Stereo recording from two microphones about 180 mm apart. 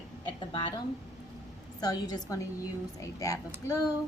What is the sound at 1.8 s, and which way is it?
A woman's voice, 20° left (ahead or behind).